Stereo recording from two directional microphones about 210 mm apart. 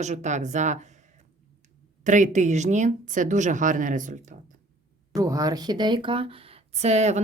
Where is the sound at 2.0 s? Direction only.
35° right (ahead or behind).